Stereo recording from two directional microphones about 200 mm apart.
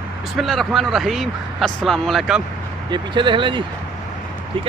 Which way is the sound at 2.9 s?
25° right (ahead or behind).